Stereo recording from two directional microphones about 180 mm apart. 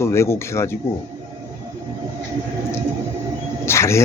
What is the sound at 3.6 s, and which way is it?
Speech, 15° left (ahead or behind).